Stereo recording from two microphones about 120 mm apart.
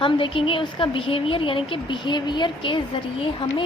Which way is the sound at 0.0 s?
45° left (ahead or behind).